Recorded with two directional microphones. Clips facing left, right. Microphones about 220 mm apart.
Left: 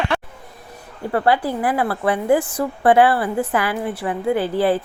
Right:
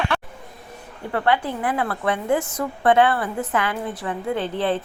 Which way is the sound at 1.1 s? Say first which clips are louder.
Left 3 dB; 35° left (ahead or behind).